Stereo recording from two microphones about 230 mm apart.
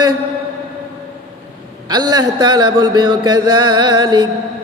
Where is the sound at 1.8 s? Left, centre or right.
Centre.